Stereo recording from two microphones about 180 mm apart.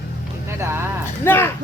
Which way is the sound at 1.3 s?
10° left (ahead or behind).